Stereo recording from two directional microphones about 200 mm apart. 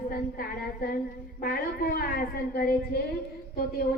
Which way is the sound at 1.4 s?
50° left (ahead or behind).